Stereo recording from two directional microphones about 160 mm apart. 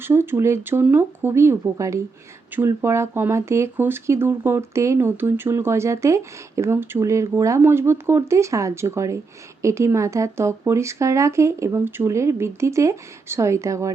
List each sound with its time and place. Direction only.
0.0 s speech: 15° right (ahead or behind)